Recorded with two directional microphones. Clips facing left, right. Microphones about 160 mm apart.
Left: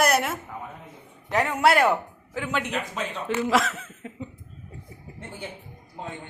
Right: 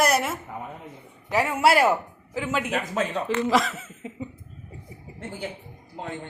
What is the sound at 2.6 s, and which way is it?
Speech, 45° right (ahead or behind).